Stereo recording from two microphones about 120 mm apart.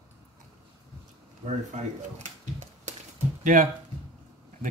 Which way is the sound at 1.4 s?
75° right (ahead or behind).